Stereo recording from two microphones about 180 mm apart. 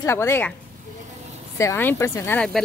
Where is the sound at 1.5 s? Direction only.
15° left (ahead or behind).